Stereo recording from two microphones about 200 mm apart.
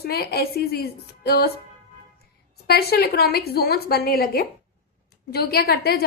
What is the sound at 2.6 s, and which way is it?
A woman's voice, 50° left (ahead or behind).